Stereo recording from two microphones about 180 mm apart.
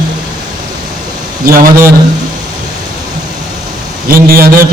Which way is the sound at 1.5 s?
50° right (ahead or behind).